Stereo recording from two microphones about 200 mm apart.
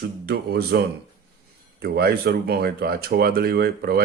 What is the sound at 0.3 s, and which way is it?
Speech, 50° right (ahead or behind).